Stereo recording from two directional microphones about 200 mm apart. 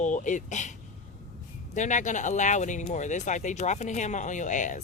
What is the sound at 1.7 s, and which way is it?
Speech, 40° left (ahead or behind).